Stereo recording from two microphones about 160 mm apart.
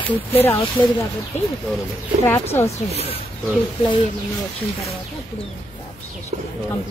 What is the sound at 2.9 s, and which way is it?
Speech, 40° left (ahead or behind).